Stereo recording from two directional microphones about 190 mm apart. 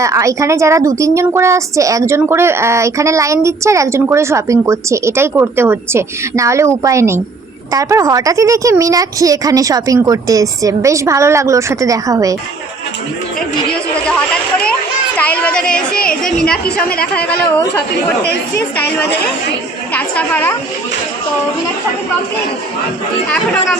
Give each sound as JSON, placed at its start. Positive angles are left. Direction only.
{"t": 0.0, "sound": "a woman's voice", "side_deg": -15}
{"t": 14.6, "sound": "a sound", "side_deg": 5}
{"t": 16.2, "sound": "a woman's voice", "side_deg": 5}
{"t": 16.9, "sound": "speech", "side_deg": 55}
{"t": 19.9, "sound": "a woman's voice", "side_deg": 10}